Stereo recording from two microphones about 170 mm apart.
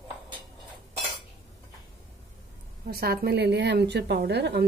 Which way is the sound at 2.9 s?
65° right (ahead or behind).